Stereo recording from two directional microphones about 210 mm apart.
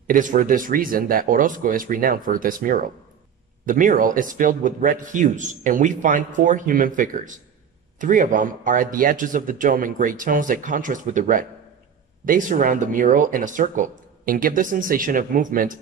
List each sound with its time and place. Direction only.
0.0 s speech: 40° right (ahead or behind)